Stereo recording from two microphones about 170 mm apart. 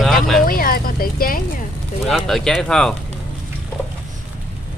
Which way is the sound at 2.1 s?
Centre (ahead or behind).